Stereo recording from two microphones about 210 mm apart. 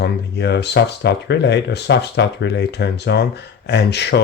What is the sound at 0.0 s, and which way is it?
Speech, 55° left (ahead or behind).